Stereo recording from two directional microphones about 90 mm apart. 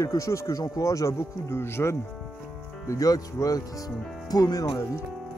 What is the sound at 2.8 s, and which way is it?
Speech, 40° left (ahead or behind).